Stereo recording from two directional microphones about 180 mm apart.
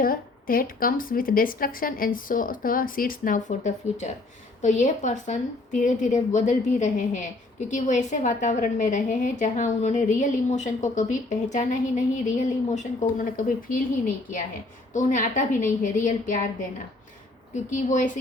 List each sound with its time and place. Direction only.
0.0 s a woman's voice: 50° left (ahead or behind)
14.9 s a woman's voice: 45° left (ahead or behind)
17.5 s a woman's voice: 45° left (ahead or behind)